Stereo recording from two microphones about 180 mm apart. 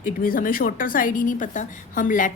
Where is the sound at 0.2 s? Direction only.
50° left (ahead or behind).